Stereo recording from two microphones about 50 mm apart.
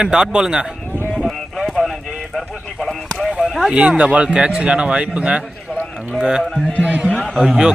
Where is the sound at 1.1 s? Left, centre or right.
Centre.